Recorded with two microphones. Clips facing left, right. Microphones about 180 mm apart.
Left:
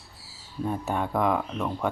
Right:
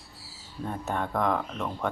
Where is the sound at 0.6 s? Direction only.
10° left (ahead or behind).